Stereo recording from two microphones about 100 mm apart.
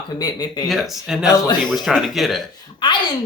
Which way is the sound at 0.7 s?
5° right (ahead or behind).